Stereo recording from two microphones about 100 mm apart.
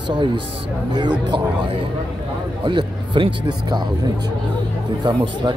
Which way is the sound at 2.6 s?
55° right (ahead or behind).